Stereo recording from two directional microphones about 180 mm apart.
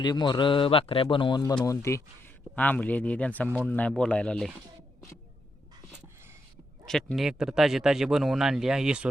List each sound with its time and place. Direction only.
0.0 s a man's voice: 25° left (ahead or behind); by 4.5 s 5° left (ahead or behind)
6.8 s speech: centre (ahead or behind)